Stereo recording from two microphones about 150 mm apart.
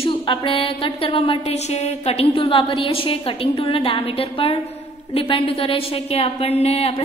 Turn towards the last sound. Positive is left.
turn(degrees=40)  # may be behind; listen again after turning